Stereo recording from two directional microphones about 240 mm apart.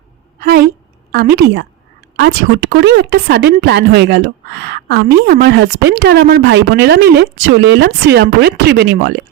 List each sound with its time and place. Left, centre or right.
0.3 s a sound: right
1.1 s a woman's voice: right
2.7 s a woman's voice: right